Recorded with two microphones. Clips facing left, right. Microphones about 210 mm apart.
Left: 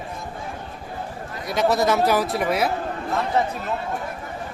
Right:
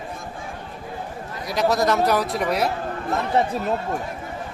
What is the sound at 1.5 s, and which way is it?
Speech, centre (ahead or behind).